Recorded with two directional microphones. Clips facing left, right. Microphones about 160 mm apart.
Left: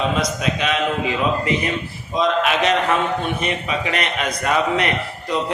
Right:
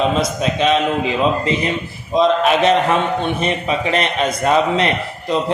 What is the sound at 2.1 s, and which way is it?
A man's voice, 30° right (ahead or behind).